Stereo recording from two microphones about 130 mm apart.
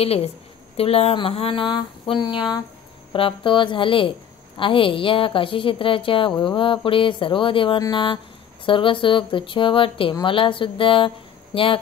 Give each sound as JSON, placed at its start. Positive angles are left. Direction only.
{"t": 0.0, "sound": "speech", "side_deg": 50}